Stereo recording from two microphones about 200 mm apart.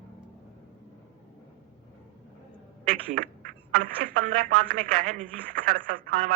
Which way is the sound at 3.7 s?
40° right (ahead or behind).